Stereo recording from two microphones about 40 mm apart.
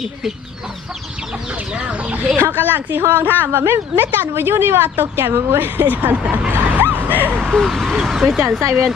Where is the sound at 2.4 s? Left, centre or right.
Right.